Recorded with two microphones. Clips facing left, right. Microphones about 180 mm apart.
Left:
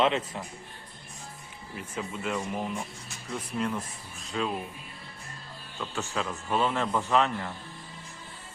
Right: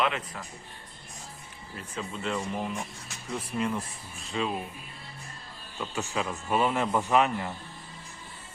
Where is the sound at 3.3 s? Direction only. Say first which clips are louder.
Right 1 dB; 10° right (ahead or behind).